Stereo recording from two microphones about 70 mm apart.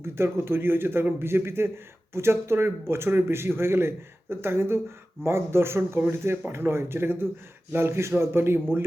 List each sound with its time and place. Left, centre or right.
0.0 s a man's voice: right